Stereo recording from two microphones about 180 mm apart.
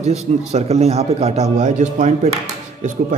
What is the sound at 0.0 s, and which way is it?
A man's voice, 35° right (ahead or behind).